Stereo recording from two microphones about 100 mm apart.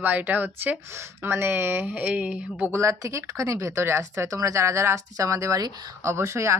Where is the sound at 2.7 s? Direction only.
30° right (ahead or behind).